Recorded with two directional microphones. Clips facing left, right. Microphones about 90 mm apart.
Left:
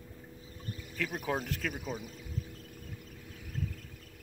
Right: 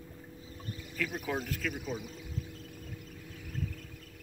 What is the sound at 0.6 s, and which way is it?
Rowboat, 40° left (ahead or behind).